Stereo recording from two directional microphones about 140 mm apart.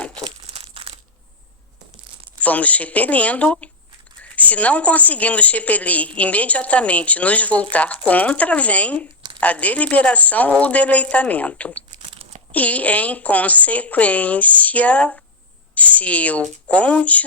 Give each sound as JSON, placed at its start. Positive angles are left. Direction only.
{"t": 0.4, "sound": "crumpling", "side_deg": -45}
{"t": 2.4, "sound": "a woman's voice", "side_deg": 10}
{"t": 12.0, "sound": "crumpling", "side_deg": -45}
{"t": 12.5, "sound": "a woman's voice", "side_deg": 10}